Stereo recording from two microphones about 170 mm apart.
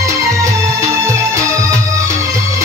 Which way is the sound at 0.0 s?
20° right (ahead or behind).